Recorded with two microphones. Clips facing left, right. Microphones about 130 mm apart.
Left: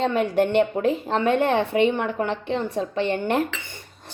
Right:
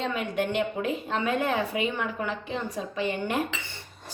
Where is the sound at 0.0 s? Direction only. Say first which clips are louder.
Left 8 dB; 35° left (ahead or behind).